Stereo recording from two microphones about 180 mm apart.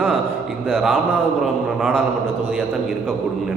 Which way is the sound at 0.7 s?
5° right (ahead or behind).